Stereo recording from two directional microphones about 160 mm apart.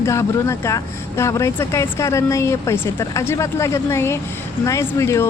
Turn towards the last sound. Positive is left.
turn(degrees=20)  # may be behind; listen again after turning